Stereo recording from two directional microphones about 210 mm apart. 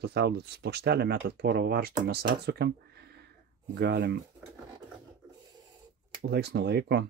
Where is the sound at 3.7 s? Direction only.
50° right (ahead or behind).